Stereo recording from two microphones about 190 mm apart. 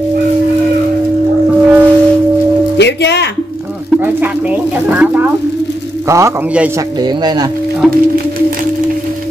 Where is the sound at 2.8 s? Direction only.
65° left (ahead or behind).